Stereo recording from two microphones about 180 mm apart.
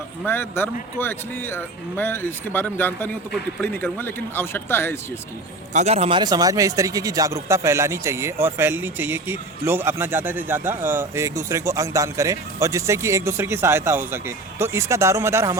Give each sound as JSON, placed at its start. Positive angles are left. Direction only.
{"t": 0.3, "sound": "speech", "side_deg": 10}
{"t": 5.7, "sound": "speech", "side_deg": -35}